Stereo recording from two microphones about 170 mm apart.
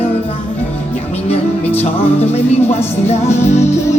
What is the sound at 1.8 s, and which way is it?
Music, 40° left (ahead or behind).